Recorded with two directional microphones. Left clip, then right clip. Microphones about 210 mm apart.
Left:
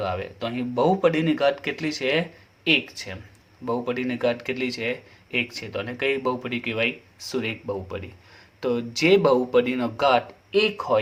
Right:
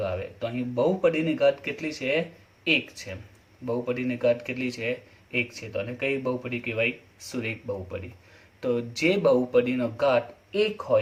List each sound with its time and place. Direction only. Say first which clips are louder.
0.0 s speech: left 2 dB; 40° left (ahead or behind)